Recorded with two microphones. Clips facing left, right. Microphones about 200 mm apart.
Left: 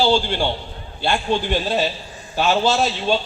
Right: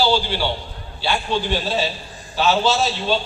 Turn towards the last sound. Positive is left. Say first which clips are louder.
# left 1 dB
turn(degrees=50)  # may be behind; listen again after turning